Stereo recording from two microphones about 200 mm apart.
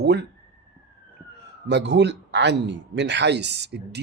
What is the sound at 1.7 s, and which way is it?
Speech, 60° right (ahead or behind).